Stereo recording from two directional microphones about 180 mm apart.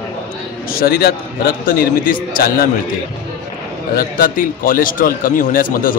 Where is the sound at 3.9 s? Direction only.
55° left (ahead or behind).